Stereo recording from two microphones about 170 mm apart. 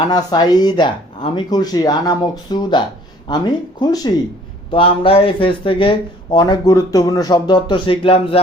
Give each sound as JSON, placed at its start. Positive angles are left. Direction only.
{"t": 0.0, "sound": "speech", "side_deg": 25}